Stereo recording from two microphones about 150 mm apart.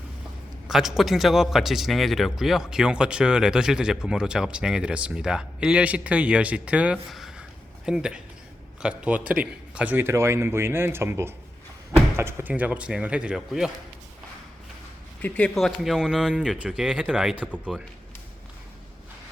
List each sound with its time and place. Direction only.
0.7 s a man's voice: centre (ahead or behind)
15.2 s a man's voice: 10° left (ahead or behind)